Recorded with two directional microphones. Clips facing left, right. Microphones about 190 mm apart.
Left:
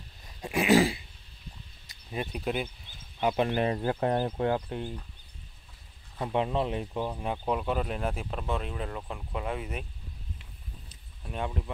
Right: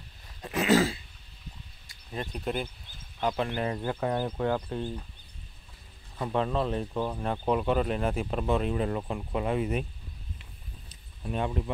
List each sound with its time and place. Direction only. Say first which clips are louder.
0.4 s dog: left 1 dB; 10° left (ahead or behind)
2.0 s speech: left 1 dB; 10° left (ahead or behind)
6.1 s speech: even; 15° left (ahead or behind); by 9.7 s centre (ahead or behind)
11.3 s speech: right 3 dB; centre (ahead or behind)